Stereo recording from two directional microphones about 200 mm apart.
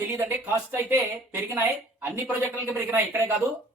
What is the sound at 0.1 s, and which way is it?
Speech, 10° right (ahead or behind).